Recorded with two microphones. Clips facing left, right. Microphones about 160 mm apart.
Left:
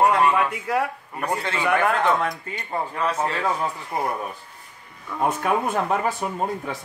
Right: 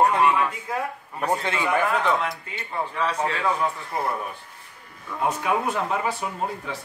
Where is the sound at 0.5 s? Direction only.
70° left (ahead or behind).